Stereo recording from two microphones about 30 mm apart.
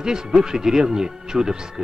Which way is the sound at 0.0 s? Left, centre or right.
Right.